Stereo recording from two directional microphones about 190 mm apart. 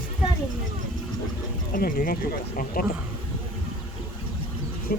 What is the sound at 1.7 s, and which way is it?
Speech, 50° left (ahead or behind).